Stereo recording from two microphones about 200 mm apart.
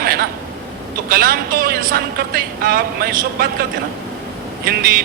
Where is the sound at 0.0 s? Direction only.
50° right (ahead or behind).